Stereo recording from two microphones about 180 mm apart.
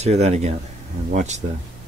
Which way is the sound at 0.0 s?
40° right (ahead or behind).